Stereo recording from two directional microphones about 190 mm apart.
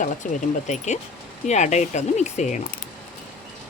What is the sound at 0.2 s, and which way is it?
Speech, 40° left (ahead or behind).